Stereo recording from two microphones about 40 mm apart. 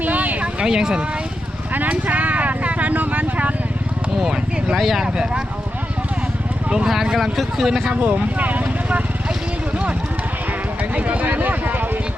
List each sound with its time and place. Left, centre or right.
0.0 s a sound: right
0.4 s a sound: centre
2.0 s vehicle: right
4.2 s speech: centre
5.0 s speech: right
6.8 s speech: centre
8.0 s speech: right
10.9 s speech: right